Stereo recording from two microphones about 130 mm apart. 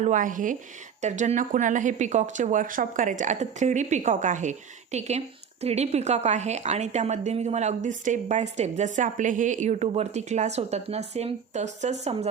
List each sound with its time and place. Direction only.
0.0 s speech: 80° right
1.0 s speech: 65° right (ahead or behind)